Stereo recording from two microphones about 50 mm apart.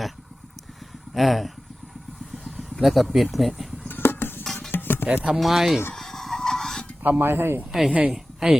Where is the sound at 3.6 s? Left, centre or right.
Centre.